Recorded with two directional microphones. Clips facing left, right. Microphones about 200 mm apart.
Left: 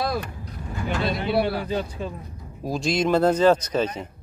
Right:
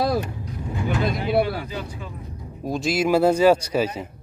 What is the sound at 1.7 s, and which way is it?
Speech, 35° left (ahead or behind).